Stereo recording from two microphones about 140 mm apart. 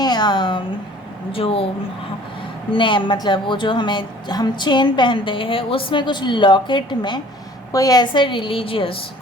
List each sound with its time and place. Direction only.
0.0 s a woman's voice: 30° left (ahead or behind)
2.7 s a woman's voice: 35° left (ahead or behind)